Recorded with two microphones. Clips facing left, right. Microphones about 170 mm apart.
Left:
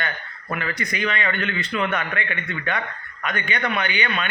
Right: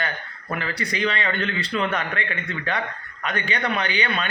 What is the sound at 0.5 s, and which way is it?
A man's voice, 30° right (ahead or behind).